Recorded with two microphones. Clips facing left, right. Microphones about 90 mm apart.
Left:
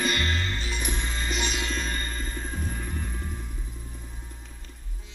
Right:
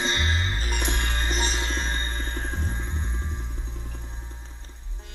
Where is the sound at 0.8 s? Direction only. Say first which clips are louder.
Right 3 dB; 70° right (ahead or behind).